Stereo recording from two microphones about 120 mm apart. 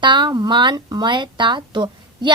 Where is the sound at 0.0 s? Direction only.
40° right (ahead or behind).